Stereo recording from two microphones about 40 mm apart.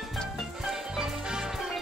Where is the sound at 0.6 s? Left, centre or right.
Centre.